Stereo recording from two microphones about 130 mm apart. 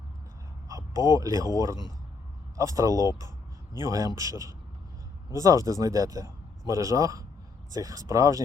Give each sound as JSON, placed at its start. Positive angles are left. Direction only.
{"t": 0.7, "sound": "a man's voice", "side_deg": -25}